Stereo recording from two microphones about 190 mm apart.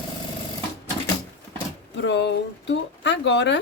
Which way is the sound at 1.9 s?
70° left (ahead or behind).